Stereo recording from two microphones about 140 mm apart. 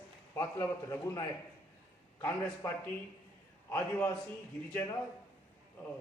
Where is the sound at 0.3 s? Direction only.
25° left (ahead or behind).